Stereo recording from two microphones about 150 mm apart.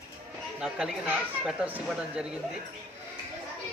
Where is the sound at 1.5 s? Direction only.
10° right (ahead or behind).